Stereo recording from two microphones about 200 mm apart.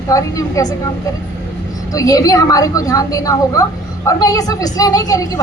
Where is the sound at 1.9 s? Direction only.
15° left (ahead or behind).